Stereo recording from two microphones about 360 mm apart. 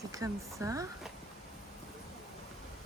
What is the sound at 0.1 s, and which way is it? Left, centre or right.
Speech, centre.